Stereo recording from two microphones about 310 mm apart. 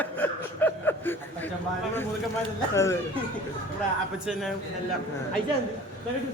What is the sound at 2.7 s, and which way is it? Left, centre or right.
Speech, centre.